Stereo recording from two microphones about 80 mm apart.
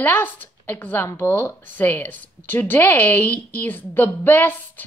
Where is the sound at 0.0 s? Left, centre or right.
Left.